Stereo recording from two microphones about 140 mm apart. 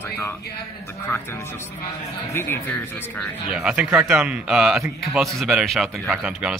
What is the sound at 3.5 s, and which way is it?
A man's voice, 5° right (ahead or behind).